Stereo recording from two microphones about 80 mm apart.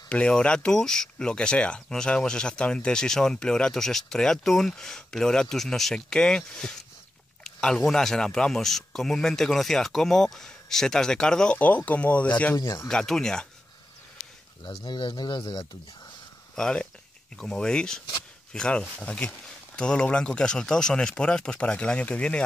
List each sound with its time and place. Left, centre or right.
0.1 s speech: centre
11.5 s speech: centre
12.5 s speech: left
12.8 s speech: centre
14.9 s speech: left
16.5 s speech: centre